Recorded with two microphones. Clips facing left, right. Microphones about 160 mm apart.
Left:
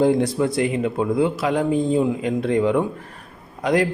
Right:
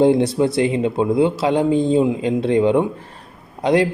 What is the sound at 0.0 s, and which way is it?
Speech, 25° right (ahead or behind).